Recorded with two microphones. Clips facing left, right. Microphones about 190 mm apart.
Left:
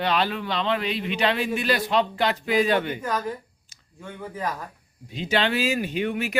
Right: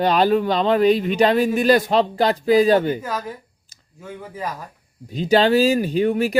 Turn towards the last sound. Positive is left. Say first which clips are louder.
# right 7 dB
turn(degrees=-35)  # may be behind; listen again after turning